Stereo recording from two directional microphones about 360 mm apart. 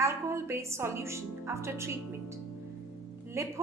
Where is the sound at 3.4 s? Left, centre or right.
Centre.